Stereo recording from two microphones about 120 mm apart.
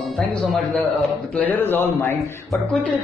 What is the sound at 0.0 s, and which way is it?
Speech, centre (ahead or behind).